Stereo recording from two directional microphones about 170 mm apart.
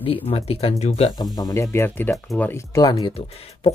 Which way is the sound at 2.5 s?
20° left (ahead or behind).